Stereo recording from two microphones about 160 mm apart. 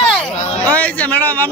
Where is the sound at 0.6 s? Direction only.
10° left (ahead or behind).